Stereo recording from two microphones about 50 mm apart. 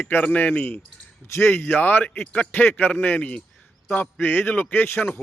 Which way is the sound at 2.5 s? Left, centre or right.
Left.